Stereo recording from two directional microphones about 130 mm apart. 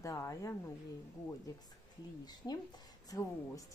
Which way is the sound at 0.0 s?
25° left (ahead or behind).